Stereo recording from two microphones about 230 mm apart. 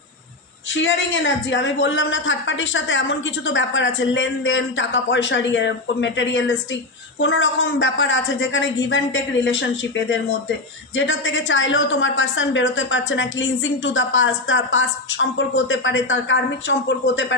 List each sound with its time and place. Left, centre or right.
0.8 s a woman's voice: left